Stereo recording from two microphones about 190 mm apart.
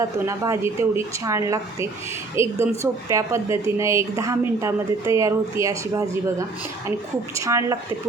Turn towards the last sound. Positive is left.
turn(degrees=-15)  # may be behind; listen again after turning